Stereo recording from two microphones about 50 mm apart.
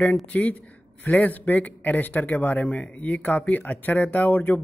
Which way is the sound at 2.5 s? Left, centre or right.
Left.